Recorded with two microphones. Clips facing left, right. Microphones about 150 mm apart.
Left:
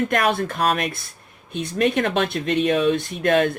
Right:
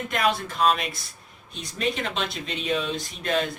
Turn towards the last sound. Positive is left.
turn(degrees=60)  # may be behind; listen again after turning